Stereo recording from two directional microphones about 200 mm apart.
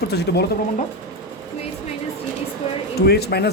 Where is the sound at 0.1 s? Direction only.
55° left (ahead or behind).